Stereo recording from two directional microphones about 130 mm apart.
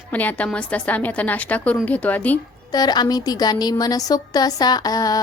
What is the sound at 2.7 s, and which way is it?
A woman's voice, 30° left (ahead or behind).